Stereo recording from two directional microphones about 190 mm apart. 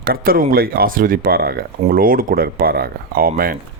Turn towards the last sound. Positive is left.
turn(degrees=-50)  # may be behind; listen again after turning